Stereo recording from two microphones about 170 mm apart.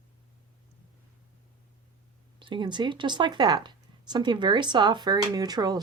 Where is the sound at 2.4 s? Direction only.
30° right (ahead or behind).